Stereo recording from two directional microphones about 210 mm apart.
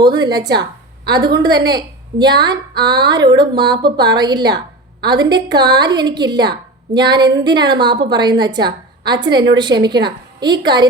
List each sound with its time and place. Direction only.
0.0 s a woman's voice: 20° right (ahead or behind)
0.6 s a sound: 50° right (ahead or behind)
1.2 s a woman's voice: 20° right (ahead or behind)